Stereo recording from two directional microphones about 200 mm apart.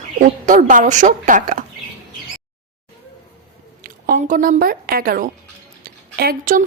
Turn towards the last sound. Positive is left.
turn(degrees=-45)  # may be behind; listen again after turning